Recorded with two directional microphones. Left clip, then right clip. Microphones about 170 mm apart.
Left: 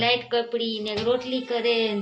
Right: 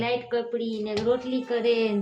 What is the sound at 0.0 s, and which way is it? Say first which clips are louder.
A woman's voice: left 4 dB; 30° right (ahead or behind).